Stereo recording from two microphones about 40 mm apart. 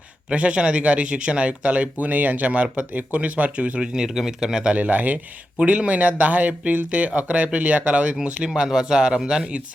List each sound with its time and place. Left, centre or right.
0.3 s speech: right
3.8 s speech: centre
4.7 s speech: right
5.5 s speech: right
8.5 s speech: right